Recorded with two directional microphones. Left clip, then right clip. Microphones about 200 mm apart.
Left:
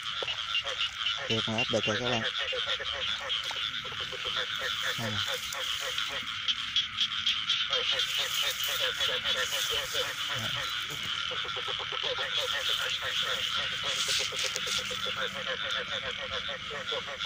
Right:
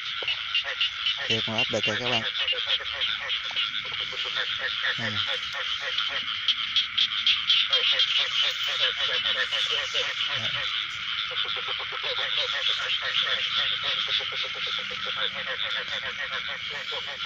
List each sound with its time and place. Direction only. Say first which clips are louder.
6.4 s frog: right 4 dB; 50° left (ahead or behind)
8.8 s speech: right 5 dB; 40° left (ahead or behind)
13.3 s speech: right 5 dB; 40° left (ahead or behind)